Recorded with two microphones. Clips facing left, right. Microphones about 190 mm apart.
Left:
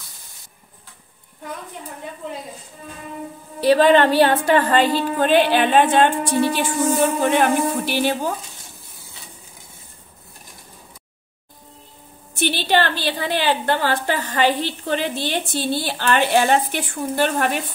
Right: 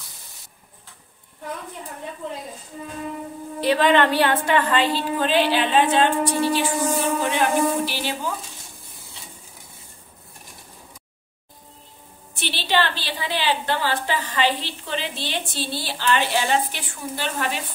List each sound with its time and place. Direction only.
3.6 s a woman's voice: 35° left (ahead or behind); by 8.3 s 50° left (ahead or behind)
12.4 s a woman's voice: 50° left (ahead or behind)